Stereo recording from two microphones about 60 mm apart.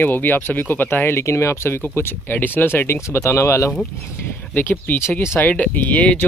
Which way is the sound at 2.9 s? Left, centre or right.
Left.